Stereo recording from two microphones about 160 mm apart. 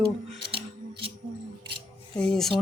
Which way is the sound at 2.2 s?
5° left (ahead or behind).